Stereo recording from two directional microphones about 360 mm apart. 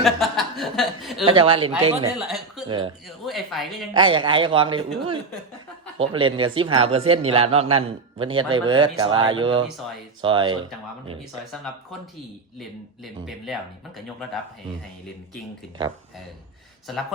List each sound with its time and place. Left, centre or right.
0.0 s speech: centre
1.2 s speech: centre
2.1 s speech: centre
2.6 s speech: centre
3.2 s speech: centre
3.9 s speech: centre
11.5 s speech: centre
13.2 s speech: centre